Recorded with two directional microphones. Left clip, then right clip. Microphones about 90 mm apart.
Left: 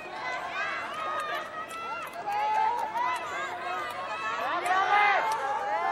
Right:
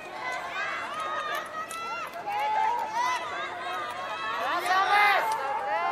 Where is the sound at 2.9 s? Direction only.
30° right (ahead or behind).